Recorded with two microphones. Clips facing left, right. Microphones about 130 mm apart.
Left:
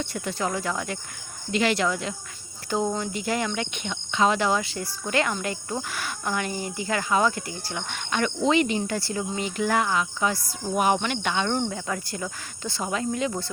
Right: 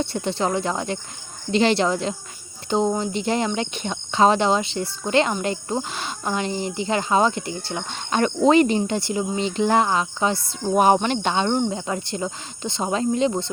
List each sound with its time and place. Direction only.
0.0 s speech: 30° right (ahead or behind)
8.9 s speech: 20° right (ahead or behind)